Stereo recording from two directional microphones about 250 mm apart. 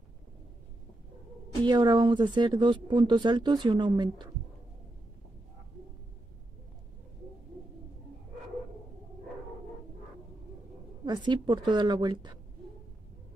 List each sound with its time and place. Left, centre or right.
1.7 s speech: centre
11.1 s speech: centre